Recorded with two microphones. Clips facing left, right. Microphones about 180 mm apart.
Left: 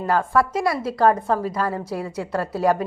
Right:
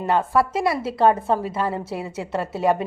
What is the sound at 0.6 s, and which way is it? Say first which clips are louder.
A woman's voice: even; 5° right (ahead or behind).